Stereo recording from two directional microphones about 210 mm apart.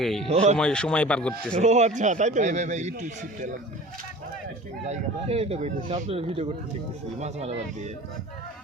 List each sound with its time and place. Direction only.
0.0 s speech: centre (ahead or behind)
0.3 s speech: 30° right (ahead or behind)
0.5 s speech: 5° left (ahead or behind)
1.5 s speech: 35° right (ahead or behind)
4.9 s speech: 30° right (ahead or behind)